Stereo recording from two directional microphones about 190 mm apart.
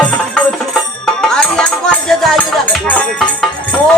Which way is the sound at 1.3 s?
5° left (ahead or behind).